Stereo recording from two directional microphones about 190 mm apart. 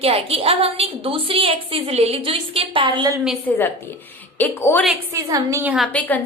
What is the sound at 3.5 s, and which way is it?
A woman's voice, 5° left (ahead or behind).